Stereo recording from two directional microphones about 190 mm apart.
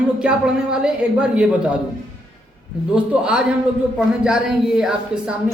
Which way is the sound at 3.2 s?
5° right (ahead or behind).